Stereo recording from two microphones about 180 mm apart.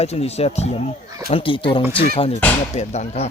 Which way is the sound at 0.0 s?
35° left (ahead or behind).